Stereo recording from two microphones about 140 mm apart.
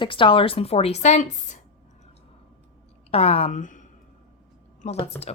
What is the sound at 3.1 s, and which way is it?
Speech, 45° left (ahead or behind).